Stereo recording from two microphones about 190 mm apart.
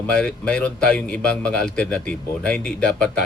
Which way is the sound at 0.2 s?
5° left (ahead or behind).